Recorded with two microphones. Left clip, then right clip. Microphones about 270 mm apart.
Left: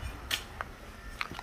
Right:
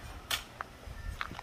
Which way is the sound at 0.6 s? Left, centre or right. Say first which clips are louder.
Left 2 dB; left.